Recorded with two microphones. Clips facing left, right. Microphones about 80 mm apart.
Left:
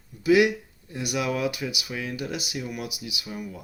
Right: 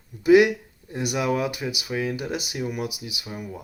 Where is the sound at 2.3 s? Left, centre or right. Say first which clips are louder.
Right 3 dB; right.